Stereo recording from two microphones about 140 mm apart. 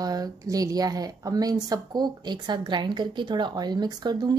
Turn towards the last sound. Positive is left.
turn(degrees=-30)  # may be behind; listen again after turning